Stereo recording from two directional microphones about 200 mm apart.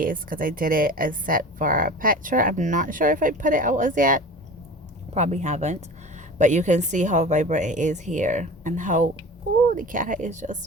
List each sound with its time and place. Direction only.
0.0 s a woman's voice: 45° right (ahead or behind)